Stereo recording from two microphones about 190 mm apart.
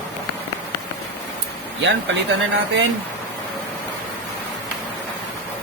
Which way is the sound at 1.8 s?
70° right (ahead or behind).